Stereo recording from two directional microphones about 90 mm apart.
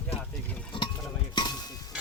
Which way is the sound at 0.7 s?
65° left (ahead or behind).